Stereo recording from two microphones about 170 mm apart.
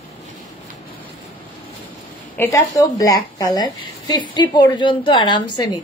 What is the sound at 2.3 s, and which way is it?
A woman's voice, 15° left (ahead or behind).